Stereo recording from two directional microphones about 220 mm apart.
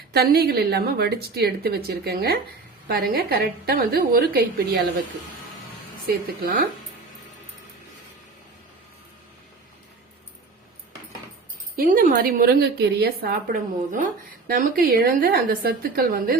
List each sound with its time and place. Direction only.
0.1 s a woman's voice: 45° right (ahead or behind)
6.1 s a woman's voice: 40° right (ahead or behind)
11.8 s a woman's voice: 40° right (ahead or behind)